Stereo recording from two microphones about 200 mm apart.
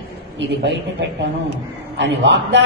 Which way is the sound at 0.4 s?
60° right (ahead or behind).